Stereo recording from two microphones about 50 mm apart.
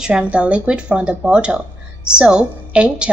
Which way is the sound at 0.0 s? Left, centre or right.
Centre.